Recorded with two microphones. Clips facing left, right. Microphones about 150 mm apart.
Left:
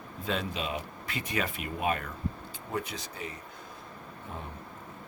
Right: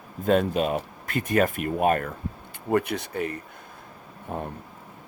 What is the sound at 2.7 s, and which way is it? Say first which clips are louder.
Speech: right 11 dB; 65° right (ahead or behind).